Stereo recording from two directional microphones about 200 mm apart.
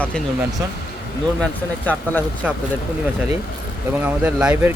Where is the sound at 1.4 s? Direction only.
10° left (ahead or behind).